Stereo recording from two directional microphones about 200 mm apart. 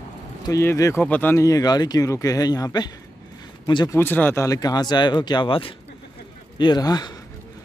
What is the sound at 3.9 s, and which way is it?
Speech, 10° left (ahead or behind).